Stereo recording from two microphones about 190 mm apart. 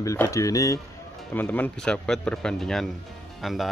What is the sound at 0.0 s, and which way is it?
Speech, 15° left (ahead or behind).